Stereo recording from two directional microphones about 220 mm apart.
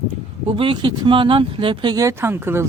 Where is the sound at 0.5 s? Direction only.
25° right (ahead or behind).